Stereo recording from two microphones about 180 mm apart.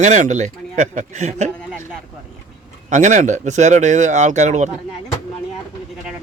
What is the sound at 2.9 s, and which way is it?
Speech, 40° right (ahead or behind).